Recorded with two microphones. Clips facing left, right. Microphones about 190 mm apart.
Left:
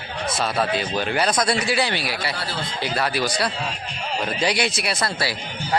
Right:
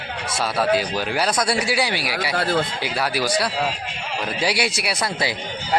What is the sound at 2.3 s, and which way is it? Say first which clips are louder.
Speech: right 9 dB; 50° right (ahead or behind).